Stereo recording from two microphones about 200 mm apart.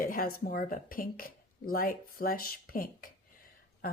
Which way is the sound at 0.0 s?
45° left (ahead or behind).